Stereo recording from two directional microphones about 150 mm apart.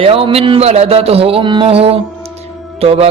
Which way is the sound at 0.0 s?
40° right (ahead or behind).